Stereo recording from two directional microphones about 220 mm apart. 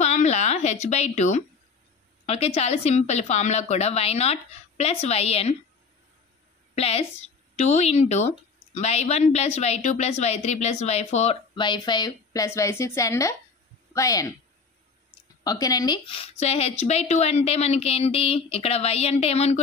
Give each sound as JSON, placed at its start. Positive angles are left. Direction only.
{"t": 0.0, "sound": "a sound", "side_deg": 30}
{"t": 2.2, "sound": "speech", "side_deg": 30}
{"t": 6.7, "sound": "a woman's voice", "side_deg": 30}
{"t": 15.4, "sound": "speech", "side_deg": 15}